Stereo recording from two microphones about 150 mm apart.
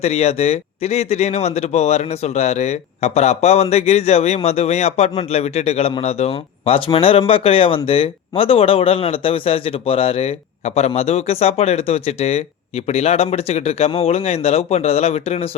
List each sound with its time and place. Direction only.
0.0 s a man's voice: 45° left (ahead or behind)